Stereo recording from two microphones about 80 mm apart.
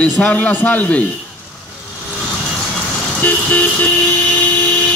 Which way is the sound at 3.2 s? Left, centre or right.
Left.